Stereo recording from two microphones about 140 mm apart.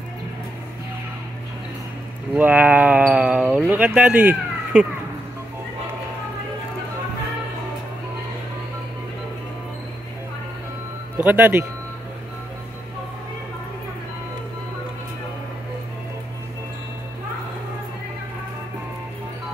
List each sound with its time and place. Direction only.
2.3 s speech: 10° right (ahead or behind)
11.1 s speech: 10° right (ahead or behind)